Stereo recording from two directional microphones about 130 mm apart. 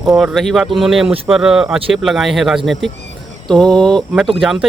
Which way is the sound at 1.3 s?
5° right (ahead or behind).